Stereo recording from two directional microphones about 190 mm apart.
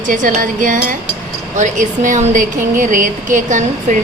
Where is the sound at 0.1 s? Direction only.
45° right (ahead or behind).